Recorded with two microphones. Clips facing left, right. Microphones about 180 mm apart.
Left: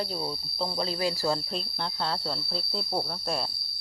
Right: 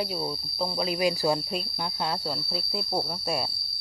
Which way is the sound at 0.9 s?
15° right (ahead or behind).